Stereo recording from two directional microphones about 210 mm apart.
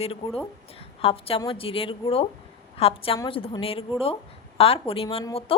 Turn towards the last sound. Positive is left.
turn(degrees=25)  # may be behind; listen again after turning